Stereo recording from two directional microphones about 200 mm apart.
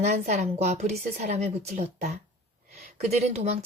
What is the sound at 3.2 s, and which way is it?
Speech, 35° right (ahead or behind).